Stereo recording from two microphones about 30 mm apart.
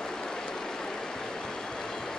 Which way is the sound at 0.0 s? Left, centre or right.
Left.